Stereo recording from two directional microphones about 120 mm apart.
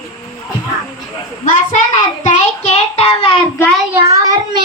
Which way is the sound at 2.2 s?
75° left (ahead or behind).